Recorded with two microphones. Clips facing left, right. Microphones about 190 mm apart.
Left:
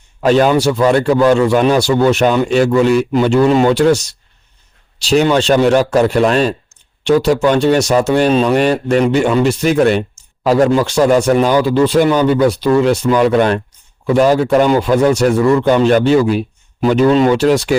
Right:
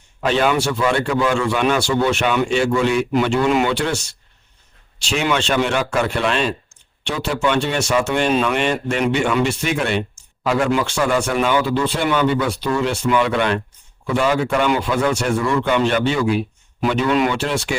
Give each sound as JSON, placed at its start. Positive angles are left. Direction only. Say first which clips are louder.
{"t": 0.3, "sound": "a man's voice", "louder": "left 7 dB", "side_deg": 40}